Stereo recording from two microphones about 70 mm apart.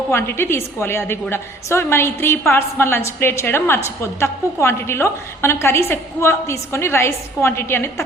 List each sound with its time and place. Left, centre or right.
0.1 s a woman's voice: left